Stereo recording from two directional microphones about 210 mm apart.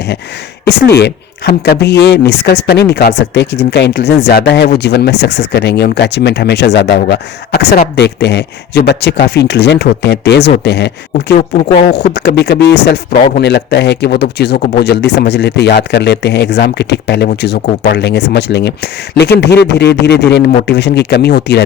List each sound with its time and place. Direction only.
0.6 s speech: 50° left (ahead or behind)
11.3 s speech: 30° left (ahead or behind)
12.1 s speech: 55° left (ahead or behind)